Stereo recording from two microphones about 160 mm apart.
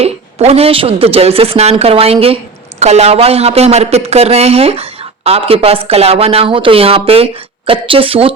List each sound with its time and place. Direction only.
0.0 s speech: 40° right (ahead or behind)